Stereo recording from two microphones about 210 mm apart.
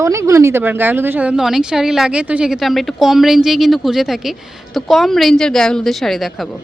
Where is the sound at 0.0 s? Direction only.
15° right (ahead or behind).